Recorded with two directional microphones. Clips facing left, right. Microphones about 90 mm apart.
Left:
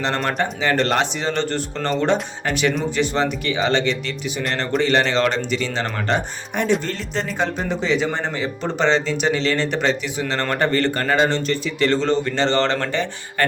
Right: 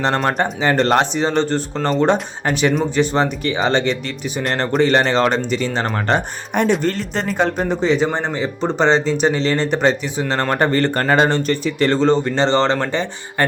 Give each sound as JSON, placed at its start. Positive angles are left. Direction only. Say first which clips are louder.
{"t": 0.0, "sound": "speech", "louder": "right 4 dB", "side_deg": -35}